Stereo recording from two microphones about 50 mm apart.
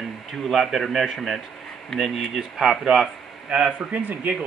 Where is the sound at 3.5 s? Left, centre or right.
Right.